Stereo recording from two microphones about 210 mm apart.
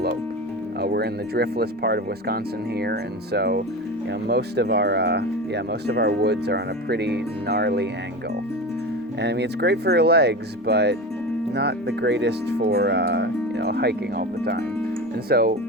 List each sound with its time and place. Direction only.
0.8 s speech: 50° right (ahead or behind)
9.2 s speech: 55° right (ahead or behind)